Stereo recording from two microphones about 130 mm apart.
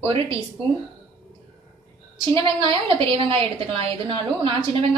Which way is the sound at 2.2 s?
40° right (ahead or behind).